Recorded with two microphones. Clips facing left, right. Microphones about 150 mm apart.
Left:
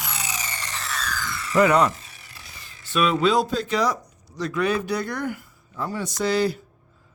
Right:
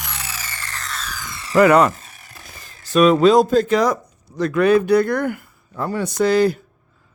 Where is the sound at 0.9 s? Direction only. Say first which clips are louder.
Left 2 dB; centre (ahead or behind).